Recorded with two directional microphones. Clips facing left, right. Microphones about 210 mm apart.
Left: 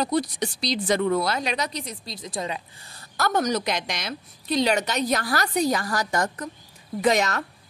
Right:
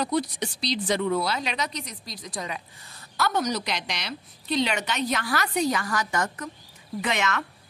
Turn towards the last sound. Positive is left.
turn(degrees=40)  # may be behind; listen again after turning